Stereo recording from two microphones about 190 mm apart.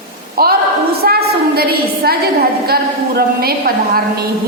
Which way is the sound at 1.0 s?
55° right (ahead or behind).